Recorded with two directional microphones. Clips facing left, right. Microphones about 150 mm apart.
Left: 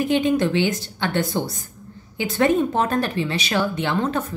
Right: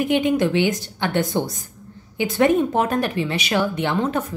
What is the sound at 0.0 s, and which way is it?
Speech, 15° right (ahead or behind).